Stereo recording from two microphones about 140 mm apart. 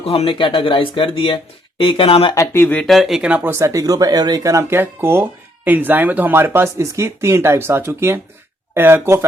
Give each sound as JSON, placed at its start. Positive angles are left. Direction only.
{"t": 0.0, "sound": "speech", "side_deg": 45}
{"t": 2.3, "sound": "speech", "side_deg": 20}
{"t": 2.8, "sound": "speech", "side_deg": 0}